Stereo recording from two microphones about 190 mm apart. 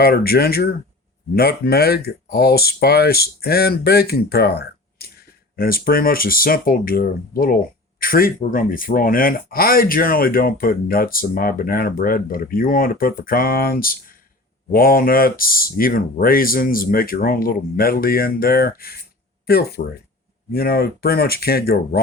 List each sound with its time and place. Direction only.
0.0 s speech: 55° left (ahead or behind)